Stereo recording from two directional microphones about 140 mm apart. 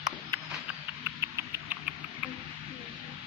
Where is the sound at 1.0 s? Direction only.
15° right (ahead or behind).